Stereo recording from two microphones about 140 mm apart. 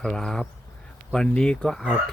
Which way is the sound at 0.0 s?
5° left (ahead or behind).